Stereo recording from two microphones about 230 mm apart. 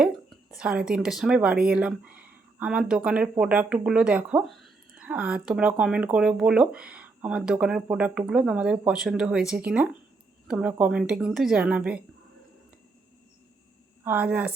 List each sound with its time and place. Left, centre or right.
0.0 s a woman's voice: centre
14.0 s speech: centre